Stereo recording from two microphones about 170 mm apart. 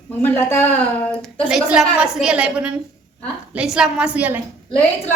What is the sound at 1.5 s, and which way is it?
A woman's voice, centre (ahead or behind).